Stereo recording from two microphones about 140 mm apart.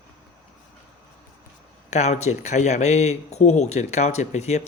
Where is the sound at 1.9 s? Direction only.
55° left (ahead or behind).